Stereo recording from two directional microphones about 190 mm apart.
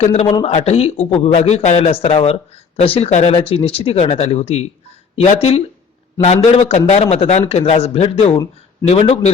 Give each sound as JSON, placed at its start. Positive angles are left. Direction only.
{"t": 0.0, "sound": "a man's voice", "side_deg": 35}